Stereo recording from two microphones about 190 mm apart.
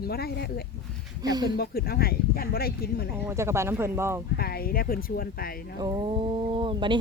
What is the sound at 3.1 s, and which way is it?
Speech, 10° right (ahead or behind).